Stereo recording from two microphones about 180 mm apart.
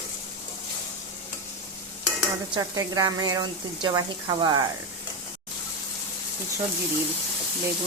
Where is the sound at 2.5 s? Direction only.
20° right (ahead or behind).